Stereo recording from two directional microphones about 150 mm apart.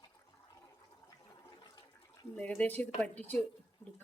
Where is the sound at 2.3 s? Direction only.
10° left (ahead or behind).